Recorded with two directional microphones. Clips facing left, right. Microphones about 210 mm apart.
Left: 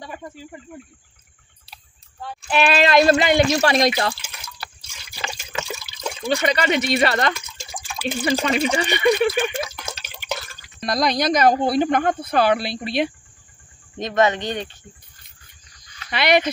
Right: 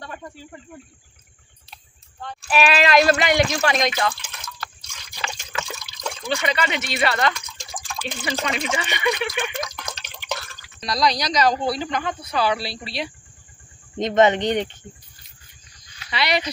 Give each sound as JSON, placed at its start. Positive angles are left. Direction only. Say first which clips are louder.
{"t": 0.0, "sound": "a sound", "louder": "left 2 dB", "side_deg": 10}
{"t": 1.7, "sound": "a sound", "louder": "even", "side_deg": 5}
{"t": 2.5, "sound": "speech", "louder": "left 1 dB", "side_deg": 25}
{"t": 4.1, "sound": "water", "louder": "left 1 dB", "side_deg": 10}
{"t": 5.7, "sound": "water", "louder": "left 2 dB", "side_deg": 5}
{"t": 6.2, "sound": "speech", "louder": "left 4 dB", "side_deg": 40}
{"t": 7.3, "sound": "a sound", "louder": "even", "side_deg": 5}
{"t": 8.6, "sound": "speech", "louder": "left 6 dB", "side_deg": 35}
{"t": 9.6, "sound": "drip", "louder": "left 2 dB", "side_deg": 5}
{"t": 10.8, "sound": "speech", "louder": "left 2 dB", "side_deg": 50}
{"t": 13.9, "sound": "speech", "louder": "right 2 dB", "side_deg": -20}
{"t": 16.1, "sound": "speech", "louder": "left 5 dB", "side_deg": 50}